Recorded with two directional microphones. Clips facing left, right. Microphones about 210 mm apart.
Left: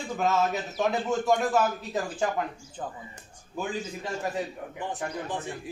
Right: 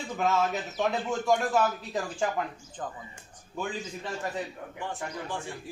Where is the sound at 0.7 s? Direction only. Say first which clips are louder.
Left 3 dB; centre (ahead or behind).